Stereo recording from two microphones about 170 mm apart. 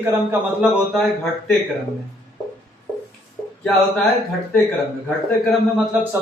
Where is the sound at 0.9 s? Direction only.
Centre (ahead or behind).